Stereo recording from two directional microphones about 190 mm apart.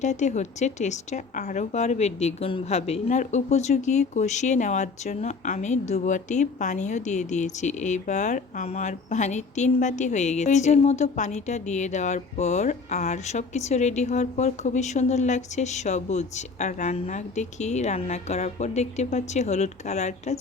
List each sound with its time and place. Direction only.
0.0 s speech: 40° left (ahead or behind)